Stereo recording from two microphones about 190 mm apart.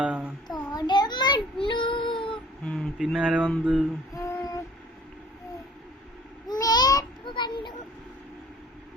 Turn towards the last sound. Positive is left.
turn(degrees=25)  # may be behind; listen again after turning